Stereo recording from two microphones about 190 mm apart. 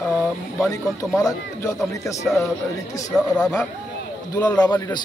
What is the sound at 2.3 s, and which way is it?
Speech, 15° left (ahead or behind).